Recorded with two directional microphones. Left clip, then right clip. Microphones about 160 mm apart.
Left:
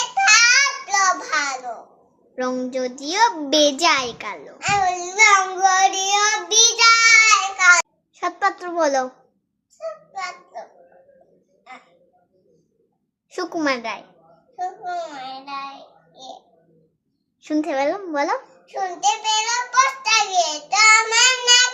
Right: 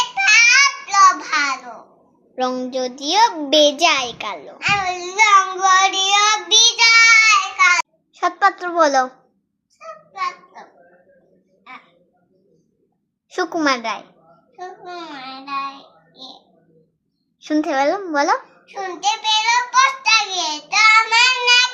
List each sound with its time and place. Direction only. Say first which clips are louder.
0.2 s child singing: right 2 dB; 25° left (ahead or behind)
2.3 s a woman's voice: right 3 dB; 15° left (ahead or behind)
3.0 s a sound: right 3 dB; 10° left (ahead or behind)
8.1 s a child's voice: right 5 dB; 5° right (ahead or behind)
9.7 s a sound: even; 30° left (ahead or behind)
13.3 s a child's voice: right 4 dB; centre (ahead or behind)
15.1 s child singing: right 4 dB; 25° left (ahead or behind)
17.4 s speech: right 3 dB; 5° right (ahead or behind)
18.6 s child singing: left 1 dB; 30° left (ahead or behind)